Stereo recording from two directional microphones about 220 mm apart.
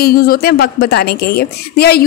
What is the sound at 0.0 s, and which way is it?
A woman's voice, 45° left (ahead or behind).